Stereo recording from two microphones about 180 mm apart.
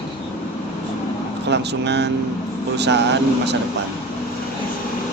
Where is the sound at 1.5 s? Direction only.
70° right (ahead or behind).